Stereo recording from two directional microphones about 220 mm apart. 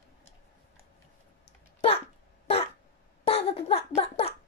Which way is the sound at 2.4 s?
25° left (ahead or behind).